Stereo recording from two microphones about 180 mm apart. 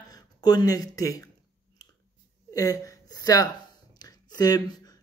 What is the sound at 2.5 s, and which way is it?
A woman's voice, 20° left (ahead or behind).